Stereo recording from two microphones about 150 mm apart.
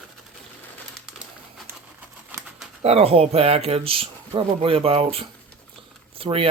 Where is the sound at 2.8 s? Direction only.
40° right (ahead or behind).